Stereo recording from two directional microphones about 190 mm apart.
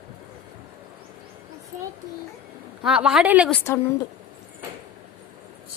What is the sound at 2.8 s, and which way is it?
Speech, 5° right (ahead or behind).